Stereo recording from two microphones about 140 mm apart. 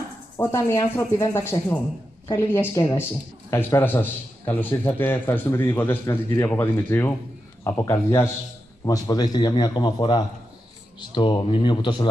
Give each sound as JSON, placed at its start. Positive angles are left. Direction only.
{"t": 0.4, "sound": "a man's voice", "side_deg": 15}